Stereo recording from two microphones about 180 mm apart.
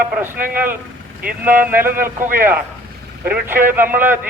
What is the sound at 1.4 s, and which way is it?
Speech, 10° right (ahead or behind).